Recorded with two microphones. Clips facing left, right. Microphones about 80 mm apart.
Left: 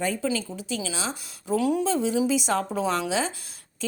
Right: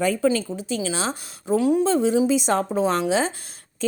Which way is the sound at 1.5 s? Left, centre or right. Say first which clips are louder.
Right 4 dB; right.